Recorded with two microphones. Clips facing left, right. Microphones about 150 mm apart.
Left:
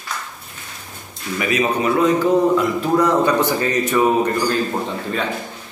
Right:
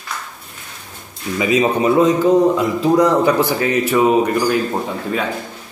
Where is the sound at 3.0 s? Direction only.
10° right (ahead or behind).